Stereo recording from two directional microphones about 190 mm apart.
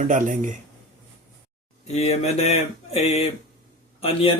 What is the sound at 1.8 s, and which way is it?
Speech, 35° left (ahead or behind).